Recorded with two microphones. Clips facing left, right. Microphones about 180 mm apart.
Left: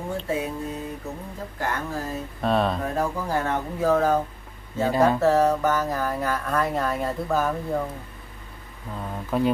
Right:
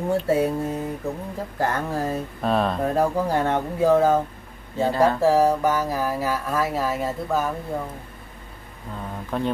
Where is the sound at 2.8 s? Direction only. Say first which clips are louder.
Right 5 dB; 35° right (ahead or behind).